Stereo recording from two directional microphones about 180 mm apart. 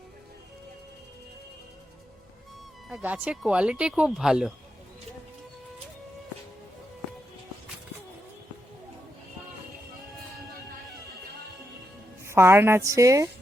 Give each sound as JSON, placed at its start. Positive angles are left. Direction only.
{"t": 2.9, "sound": "speech", "side_deg": -10}
{"t": 12.2, "sound": "a woman's voice", "side_deg": -15}